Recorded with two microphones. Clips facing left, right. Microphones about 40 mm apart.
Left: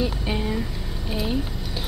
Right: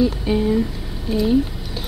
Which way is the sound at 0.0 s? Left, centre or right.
Centre.